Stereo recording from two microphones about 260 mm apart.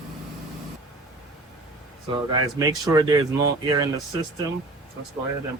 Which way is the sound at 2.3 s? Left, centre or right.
Centre.